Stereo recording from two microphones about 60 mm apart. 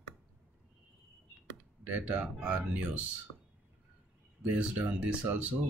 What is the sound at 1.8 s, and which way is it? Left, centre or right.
Speech, right.